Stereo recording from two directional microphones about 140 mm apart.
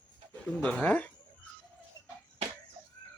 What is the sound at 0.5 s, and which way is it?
Bird, 5° left (ahead or behind).